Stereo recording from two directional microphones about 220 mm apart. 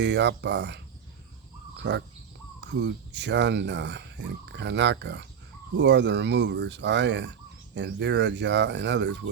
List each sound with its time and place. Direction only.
0.0 s speech: 50° right (ahead or behind)
1.8 s speech: 50° right (ahead or behind)